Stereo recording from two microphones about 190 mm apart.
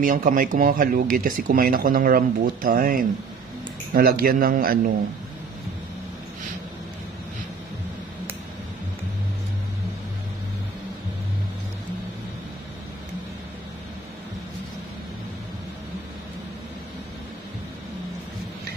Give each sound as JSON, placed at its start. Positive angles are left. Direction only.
{"t": 0.0, "sound": "speech", "side_deg": -45}